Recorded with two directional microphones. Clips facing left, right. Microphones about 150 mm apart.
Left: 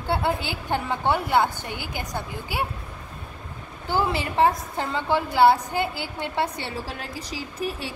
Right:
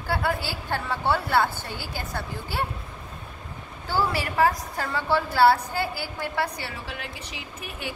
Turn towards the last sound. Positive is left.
turn(degrees=30)  # may be behind; listen again after turning